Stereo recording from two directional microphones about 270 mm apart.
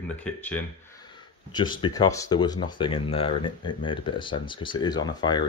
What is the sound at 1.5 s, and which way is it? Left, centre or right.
Speech, centre.